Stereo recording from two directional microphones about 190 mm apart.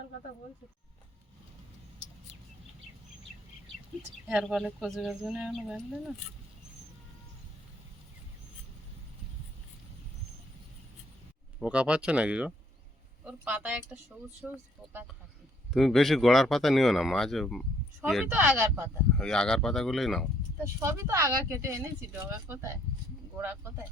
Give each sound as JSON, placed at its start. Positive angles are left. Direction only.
{"t": 4.3, "sound": "speech", "side_deg": -5}
{"t": 11.6, "sound": "speech", "side_deg": -5}
{"t": 15.7, "sound": "speech", "side_deg": 0}
{"t": 19.1, "sound": "speech", "side_deg": 5}
{"t": 20.7, "sound": "speech", "side_deg": -15}